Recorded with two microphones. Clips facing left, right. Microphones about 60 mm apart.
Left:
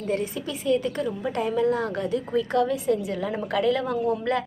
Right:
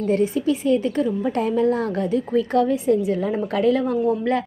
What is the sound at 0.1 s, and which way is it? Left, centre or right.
A woman's voice, right.